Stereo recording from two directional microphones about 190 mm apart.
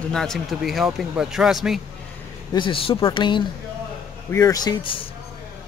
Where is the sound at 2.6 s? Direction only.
25° left (ahead or behind).